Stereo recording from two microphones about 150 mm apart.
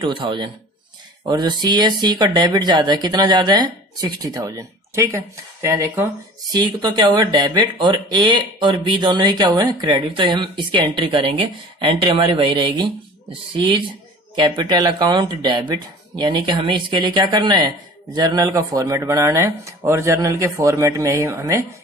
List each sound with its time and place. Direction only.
0.0 s speech: 35° right (ahead or behind); by 6.0 s 15° right (ahead or behind)
6.5 s speech: 30° right (ahead or behind)
14.3 s speech: 30° right (ahead or behind)